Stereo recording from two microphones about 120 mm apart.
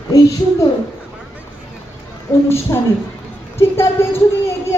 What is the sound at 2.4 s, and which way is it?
A woman's voice, 20° left (ahead or behind).